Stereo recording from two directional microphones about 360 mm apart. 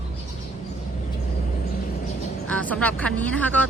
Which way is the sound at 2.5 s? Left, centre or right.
Centre.